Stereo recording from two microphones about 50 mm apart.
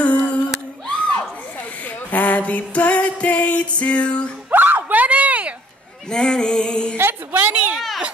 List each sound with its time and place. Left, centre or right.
0.0 s a sound: left
2.0 s music: left
4.5 s a sound: right
6.0 s music: centre
7.0 s a woman's voice: right
7.5 s speech: right